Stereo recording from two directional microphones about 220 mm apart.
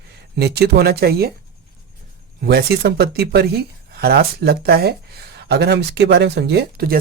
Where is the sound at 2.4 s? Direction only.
45° right (ahead or behind).